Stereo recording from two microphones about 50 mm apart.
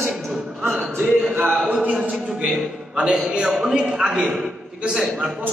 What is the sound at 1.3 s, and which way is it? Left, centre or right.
Speech, right.